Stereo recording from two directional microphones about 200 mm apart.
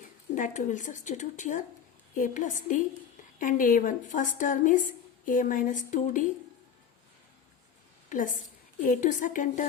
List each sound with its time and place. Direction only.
0.3 s a woman's voice: 40° left (ahead or behind)
8.8 s a woman's voice: 40° left (ahead or behind)